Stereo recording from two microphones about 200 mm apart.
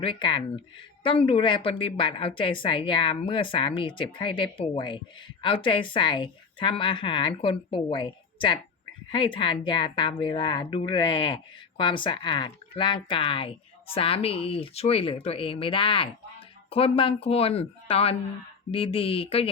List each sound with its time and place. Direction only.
0.0 s speech: 25° left (ahead or behind)